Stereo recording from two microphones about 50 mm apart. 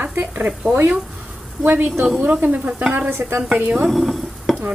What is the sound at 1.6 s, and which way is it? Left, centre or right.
Speech, right.